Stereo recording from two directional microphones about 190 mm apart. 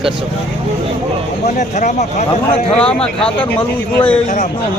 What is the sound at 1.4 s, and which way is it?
Speech, 40° left (ahead or behind).